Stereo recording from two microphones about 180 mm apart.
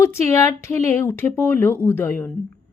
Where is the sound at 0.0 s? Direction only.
15° left (ahead or behind).